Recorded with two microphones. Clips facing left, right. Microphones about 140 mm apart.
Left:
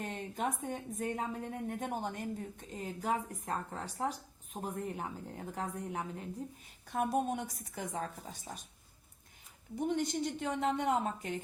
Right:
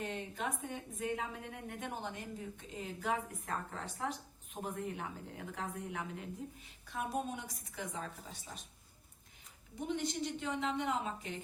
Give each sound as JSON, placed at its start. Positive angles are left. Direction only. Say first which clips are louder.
{"t": 0.0, "sound": "a woman's voice", "louder": "left 3 dB", "side_deg": 40}
{"t": 6.8, "sound": "a woman's voice", "louder": "left 6 dB", "side_deg": 50}
{"t": 9.8, "sound": "a woman's voice", "louder": "left 4 dB", "side_deg": 50}